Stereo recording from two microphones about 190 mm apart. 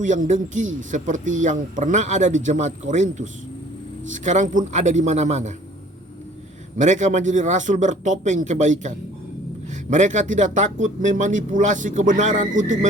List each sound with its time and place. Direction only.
0.0 s speech: 40° right (ahead or behind)
6.7 s speech: 40° right (ahead or behind)